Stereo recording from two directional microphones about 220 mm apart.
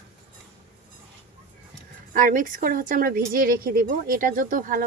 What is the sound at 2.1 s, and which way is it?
A woman's voice, 35° right (ahead or behind).